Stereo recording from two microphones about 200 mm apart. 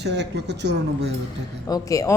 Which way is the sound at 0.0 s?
60° right (ahead or behind).